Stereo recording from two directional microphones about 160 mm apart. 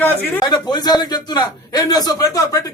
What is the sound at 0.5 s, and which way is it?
A man's voice, 25° left (ahead or behind).